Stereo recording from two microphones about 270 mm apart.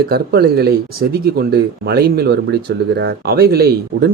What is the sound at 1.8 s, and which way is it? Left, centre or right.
Speech, right.